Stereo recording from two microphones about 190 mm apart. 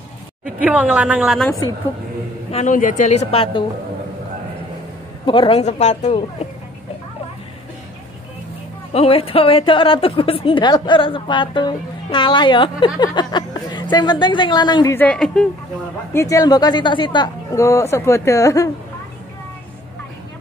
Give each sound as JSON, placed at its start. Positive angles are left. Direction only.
{"t": 0.6, "sound": "a woman's voice", "side_deg": -5}
{"t": 2.5, "sound": "speech", "side_deg": 40}
{"t": 5.2, "sound": "speech", "side_deg": 25}
{"t": 8.9, "sound": "a woman's voice", "side_deg": 30}
{"t": 15.0, "sound": "a woman's voice", "side_deg": 5}
{"t": 16.1, "sound": "speech", "side_deg": 15}